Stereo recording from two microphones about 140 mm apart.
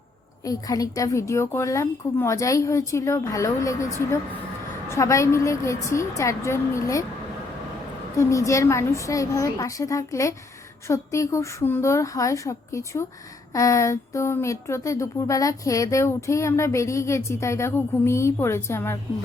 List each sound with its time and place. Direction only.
0.4 s speech: 25° left (ahead or behind)
8.1 s speech: 25° left (ahead or behind)